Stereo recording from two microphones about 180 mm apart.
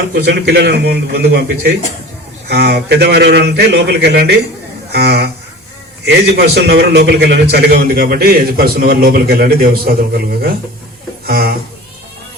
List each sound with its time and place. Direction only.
0.1 s a man's voice: 65° right (ahead or behind)
6.3 s a man's voice: 65° right (ahead or behind)